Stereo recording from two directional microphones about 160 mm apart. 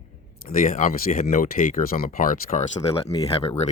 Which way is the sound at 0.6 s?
55° left (ahead or behind).